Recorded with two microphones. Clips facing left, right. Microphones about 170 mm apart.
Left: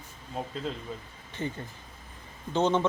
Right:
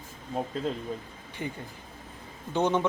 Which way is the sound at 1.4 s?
15° right (ahead or behind).